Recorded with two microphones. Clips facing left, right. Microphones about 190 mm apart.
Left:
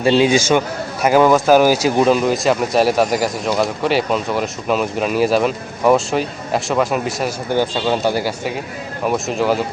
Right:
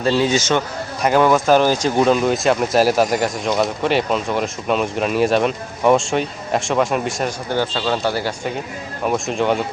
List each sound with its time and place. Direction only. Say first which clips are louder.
0.0 s speech: left 4 dB; 15° left (ahead or behind)
7.5 s speech: left 4 dB; 15° left (ahead or behind)
9.0 s speech: left 1 dB; centre (ahead or behind)